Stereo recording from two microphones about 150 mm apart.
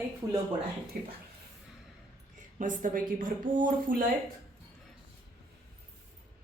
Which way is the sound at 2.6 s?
60° right (ahead or behind).